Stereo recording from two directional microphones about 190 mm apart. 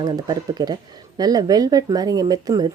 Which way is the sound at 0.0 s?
20° right (ahead or behind).